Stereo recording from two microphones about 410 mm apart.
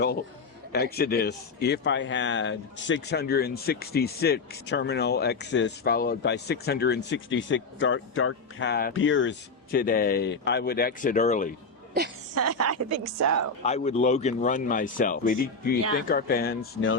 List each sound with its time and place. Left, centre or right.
0.7 s a man's voice: left
11.9 s a woman's voice: right
13.7 s a man's voice: centre